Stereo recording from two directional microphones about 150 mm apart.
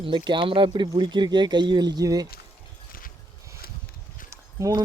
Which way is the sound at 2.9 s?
70° left (ahead or behind).